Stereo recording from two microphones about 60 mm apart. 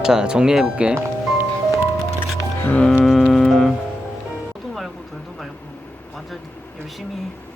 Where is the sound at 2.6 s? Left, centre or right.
Left.